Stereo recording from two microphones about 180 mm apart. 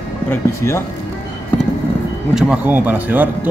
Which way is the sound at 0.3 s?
15° left (ahead or behind).